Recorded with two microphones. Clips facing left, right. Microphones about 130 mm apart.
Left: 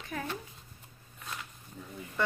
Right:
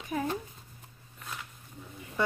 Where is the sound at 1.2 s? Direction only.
Centre (ahead or behind).